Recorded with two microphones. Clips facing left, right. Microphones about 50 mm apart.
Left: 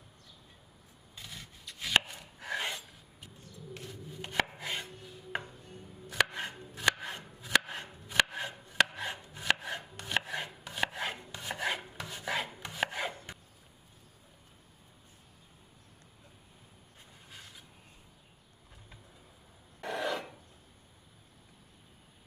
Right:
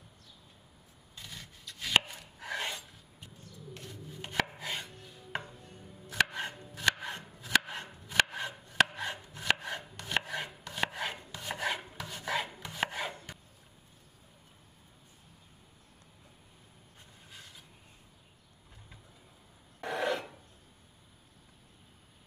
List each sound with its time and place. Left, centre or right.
1.2 s rub: centre
1.8 s chopping: centre
2.1 s a sound: centre
2.6 s filing: left
3.8 s chopping: centre
6.1 s chopping: centre
11.9 s rub: centre
19.8 s a sound: centre